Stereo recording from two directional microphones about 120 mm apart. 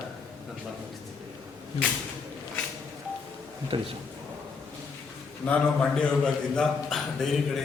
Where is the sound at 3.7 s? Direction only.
50° right (ahead or behind).